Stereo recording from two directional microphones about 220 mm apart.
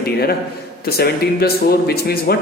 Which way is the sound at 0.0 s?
45° left (ahead or behind).